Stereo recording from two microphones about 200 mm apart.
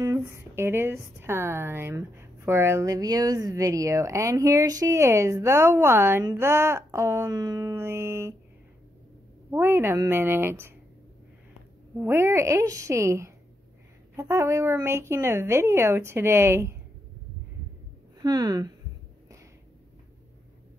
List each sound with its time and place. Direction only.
0.0 s speech: 15° right (ahead or behind)
9.5 s speech: 10° right (ahead or behind)
12.0 s speech: 10° right (ahead or behind)
18.2 s speech: 20° right (ahead or behind)